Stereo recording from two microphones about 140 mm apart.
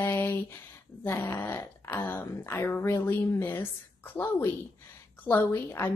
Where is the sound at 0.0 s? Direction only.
15° left (ahead or behind).